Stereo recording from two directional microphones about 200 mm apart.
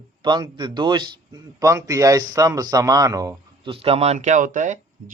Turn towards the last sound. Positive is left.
turn(degrees=-40)  # may be behind; listen again after turning